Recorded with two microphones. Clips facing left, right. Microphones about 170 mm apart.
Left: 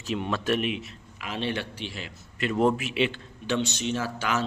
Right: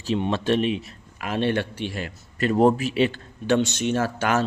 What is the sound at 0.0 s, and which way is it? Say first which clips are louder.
Speech: right 5 dB; 30° right (ahead or behind).